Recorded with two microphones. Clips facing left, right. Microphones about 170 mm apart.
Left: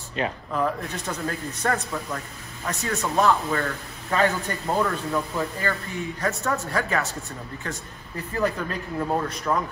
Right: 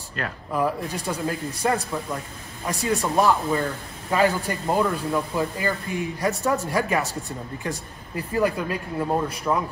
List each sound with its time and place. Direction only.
0.5 s a man's voice: 10° right (ahead or behind)